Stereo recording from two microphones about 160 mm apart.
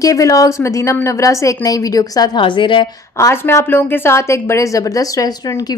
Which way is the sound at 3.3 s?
15° left (ahead or behind).